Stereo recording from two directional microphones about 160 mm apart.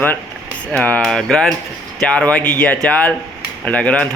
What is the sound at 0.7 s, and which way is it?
Speech, 10° left (ahead or behind).